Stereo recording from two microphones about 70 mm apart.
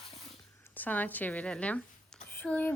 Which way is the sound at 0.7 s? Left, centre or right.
Left.